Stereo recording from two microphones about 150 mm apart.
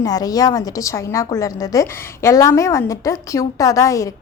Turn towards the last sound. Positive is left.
turn(degrees=20)  # may be behind; listen again after turning